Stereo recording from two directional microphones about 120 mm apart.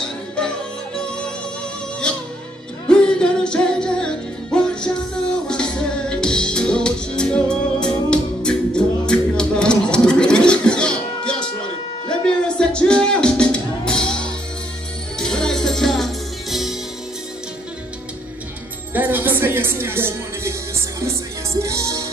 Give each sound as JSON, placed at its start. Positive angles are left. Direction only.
{"t": 2.9, "sound": "music", "side_deg": 5}
{"t": 18.9, "sound": "music", "side_deg": -15}